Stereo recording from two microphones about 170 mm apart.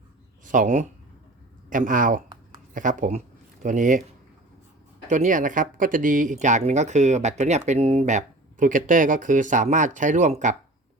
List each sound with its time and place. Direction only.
0.4 s speech: 50° right (ahead or behind)
5.0 s speech: 45° right (ahead or behind)